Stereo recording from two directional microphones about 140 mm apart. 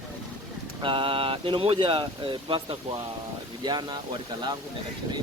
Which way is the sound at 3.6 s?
30° right (ahead or behind).